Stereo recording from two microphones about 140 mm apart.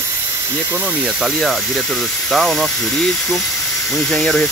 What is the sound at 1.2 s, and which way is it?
Speech, centre (ahead or behind).